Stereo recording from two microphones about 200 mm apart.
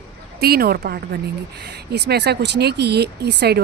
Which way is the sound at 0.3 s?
50° right (ahead or behind).